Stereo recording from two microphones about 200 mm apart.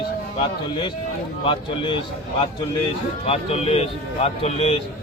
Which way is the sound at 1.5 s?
25° left (ahead or behind).